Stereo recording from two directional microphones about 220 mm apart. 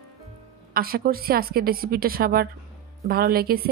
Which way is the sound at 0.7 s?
40° right (ahead or behind).